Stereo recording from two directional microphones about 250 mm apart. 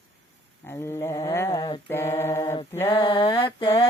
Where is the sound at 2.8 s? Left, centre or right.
Centre.